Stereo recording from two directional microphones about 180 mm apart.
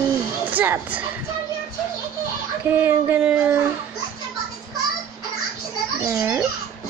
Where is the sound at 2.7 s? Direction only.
10° right (ahead or behind).